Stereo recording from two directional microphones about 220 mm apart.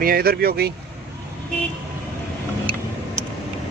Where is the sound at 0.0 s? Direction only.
45° right (ahead or behind).